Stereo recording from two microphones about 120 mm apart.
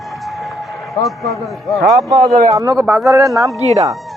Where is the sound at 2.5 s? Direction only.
30° right (ahead or behind).